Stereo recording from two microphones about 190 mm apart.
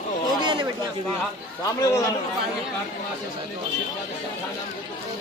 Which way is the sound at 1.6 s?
15° left (ahead or behind).